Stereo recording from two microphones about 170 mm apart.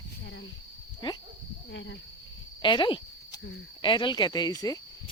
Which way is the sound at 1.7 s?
90° left.